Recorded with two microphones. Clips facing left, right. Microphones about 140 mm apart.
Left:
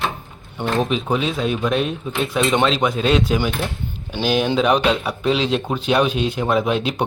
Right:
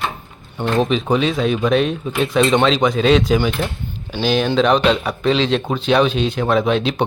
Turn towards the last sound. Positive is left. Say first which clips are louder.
# right 3 dB
turn(degrees=10)  # may be behind; listen again after turning